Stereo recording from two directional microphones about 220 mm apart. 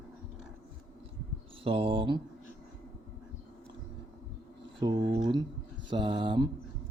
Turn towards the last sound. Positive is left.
turn(degrees=-20)  # may be behind; listen again after turning